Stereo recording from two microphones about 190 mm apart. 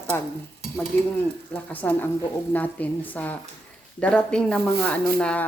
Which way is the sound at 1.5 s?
10° left (ahead or behind).